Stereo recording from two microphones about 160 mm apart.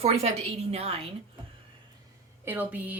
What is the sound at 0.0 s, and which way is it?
A woman's voice, 40° right (ahead or behind).